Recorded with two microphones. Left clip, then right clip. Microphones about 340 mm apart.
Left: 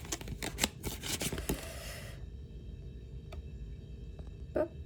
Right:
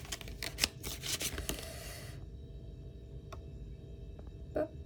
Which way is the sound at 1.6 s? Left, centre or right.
Centre.